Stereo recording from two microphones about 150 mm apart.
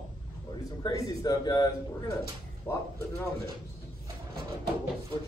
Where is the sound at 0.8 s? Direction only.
25° left (ahead or behind).